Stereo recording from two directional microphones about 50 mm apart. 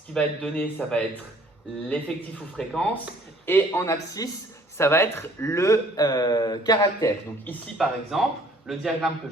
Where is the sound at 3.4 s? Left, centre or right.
Left.